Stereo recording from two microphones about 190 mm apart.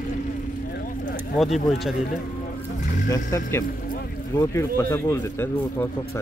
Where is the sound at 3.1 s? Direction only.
15° left (ahead or behind).